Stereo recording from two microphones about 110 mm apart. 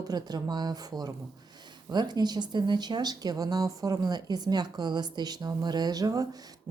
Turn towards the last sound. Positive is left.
turn(degrees=-35)  # may be behind; listen again after turning